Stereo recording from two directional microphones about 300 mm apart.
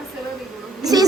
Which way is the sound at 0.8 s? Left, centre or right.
Centre.